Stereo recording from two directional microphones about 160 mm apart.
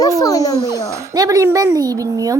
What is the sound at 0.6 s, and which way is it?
A child's voice, 20° right (ahead or behind).